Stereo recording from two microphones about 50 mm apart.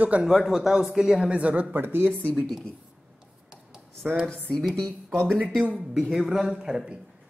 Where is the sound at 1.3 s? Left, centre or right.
Right.